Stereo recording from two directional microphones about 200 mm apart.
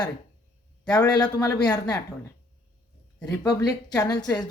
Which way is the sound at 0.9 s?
20° left (ahead or behind).